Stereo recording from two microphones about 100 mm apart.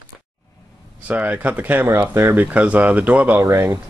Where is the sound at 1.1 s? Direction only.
15° right (ahead or behind).